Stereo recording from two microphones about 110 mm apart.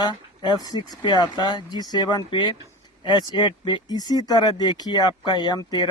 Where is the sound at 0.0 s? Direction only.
40° left (ahead or behind).